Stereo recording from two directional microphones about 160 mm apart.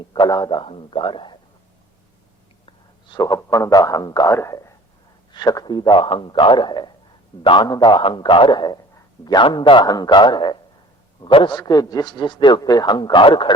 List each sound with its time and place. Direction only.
0.0 s a man's voice: 30° left (ahead or behind)
2.6 s a man's voice: 25° left (ahead or behind)